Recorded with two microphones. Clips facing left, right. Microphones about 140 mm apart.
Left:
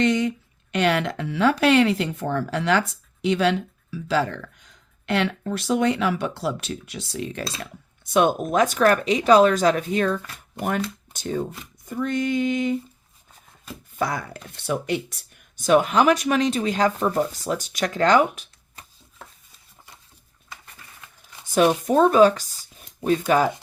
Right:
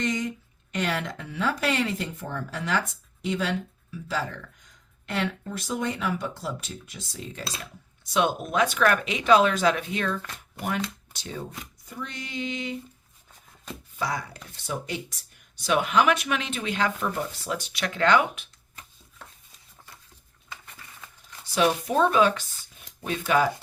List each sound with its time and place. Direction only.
0.0 s a woman's voice: 70° left (ahead or behind)
7.6 s speech: 50° left (ahead or behind)
11.9 s a sound: 50° left (ahead or behind)
14.0 s speech: 55° left (ahead or behind)
15.5 s speech: 45° left (ahead or behind)
21.4 s speech: 45° left (ahead or behind)